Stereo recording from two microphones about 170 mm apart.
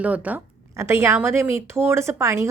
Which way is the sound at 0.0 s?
10° right (ahead or behind).